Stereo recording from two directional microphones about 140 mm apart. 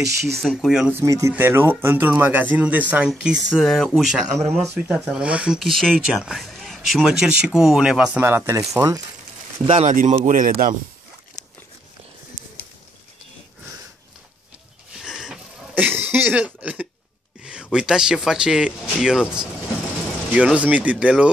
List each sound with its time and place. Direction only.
0.0 s speech: 20° right (ahead or behind)
0.4 s speech: centre (ahead or behind)
0.9 s speech: 20° right (ahead or behind); by 8.2 s 5° right (ahead or behind)
8.2 s speech: 15° right (ahead or behind)
9.7 s speech: 65° right (ahead or behind)
15.0 s a sound: 5° right (ahead or behind)
17.4 s speech: 5° right (ahead or behind)